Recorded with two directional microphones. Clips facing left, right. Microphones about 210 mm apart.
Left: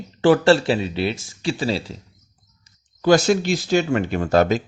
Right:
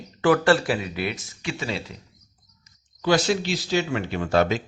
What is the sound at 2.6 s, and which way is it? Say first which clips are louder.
Speech: left 6 dB; 45° left (ahead or behind).